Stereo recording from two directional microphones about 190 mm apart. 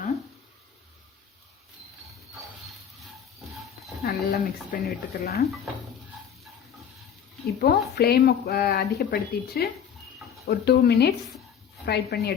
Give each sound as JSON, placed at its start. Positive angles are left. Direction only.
{"t": 4.0, "sound": "speech", "side_deg": 50}
{"t": 7.6, "sound": "speech", "side_deg": 55}